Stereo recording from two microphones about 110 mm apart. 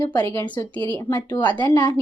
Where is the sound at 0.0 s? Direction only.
40° left (ahead or behind).